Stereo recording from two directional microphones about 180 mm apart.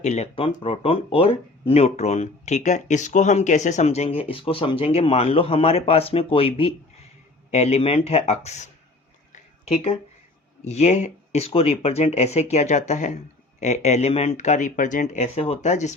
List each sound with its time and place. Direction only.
0.0 s speech: 35° left (ahead or behind)
9.3 s a sound: 40° left (ahead or behind)
10.6 s speech: 35° left (ahead or behind)